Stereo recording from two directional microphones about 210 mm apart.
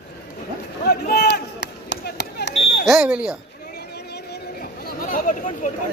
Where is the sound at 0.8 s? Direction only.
50° left (ahead or behind).